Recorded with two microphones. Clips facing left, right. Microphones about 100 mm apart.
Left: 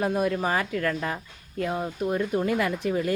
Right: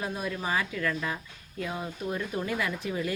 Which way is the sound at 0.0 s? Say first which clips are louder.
Left 8 dB; 50° left (ahead or behind).